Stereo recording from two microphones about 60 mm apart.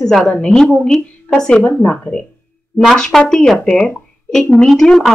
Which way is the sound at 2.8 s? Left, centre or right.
Centre.